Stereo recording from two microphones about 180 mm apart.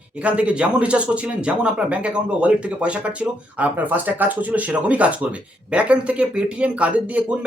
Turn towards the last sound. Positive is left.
turn(degrees=-10)  # may be behind; listen again after turning